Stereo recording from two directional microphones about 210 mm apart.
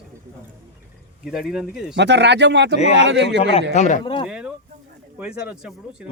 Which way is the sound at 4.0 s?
25° left (ahead or behind).